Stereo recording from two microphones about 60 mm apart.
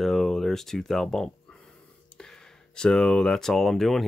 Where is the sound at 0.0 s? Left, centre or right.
Centre.